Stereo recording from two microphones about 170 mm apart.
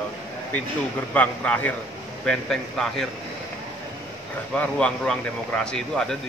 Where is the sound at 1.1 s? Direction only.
10° left (ahead or behind).